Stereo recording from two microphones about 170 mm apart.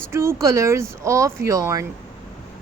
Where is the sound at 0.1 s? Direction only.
15° right (ahead or behind).